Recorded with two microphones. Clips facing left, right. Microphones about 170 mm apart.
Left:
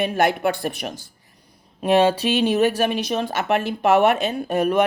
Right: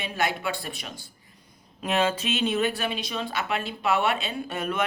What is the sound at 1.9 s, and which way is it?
A woman's voice, 35° left (ahead or behind).